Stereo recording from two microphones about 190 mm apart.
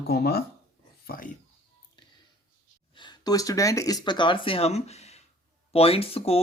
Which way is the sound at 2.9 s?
25° left (ahead or behind).